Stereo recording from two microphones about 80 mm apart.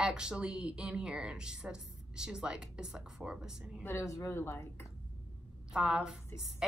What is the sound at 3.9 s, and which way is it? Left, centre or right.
A woman's voice, left.